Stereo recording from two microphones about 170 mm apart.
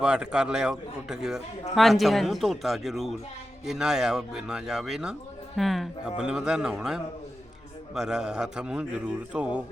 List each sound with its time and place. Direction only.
0.0 s a man's voice: 5° right (ahead or behind)